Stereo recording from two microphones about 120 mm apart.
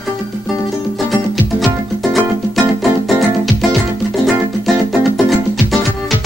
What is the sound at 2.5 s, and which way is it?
Music, centre (ahead or behind).